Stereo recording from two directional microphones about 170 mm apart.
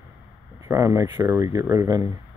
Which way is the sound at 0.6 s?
20° right (ahead or behind).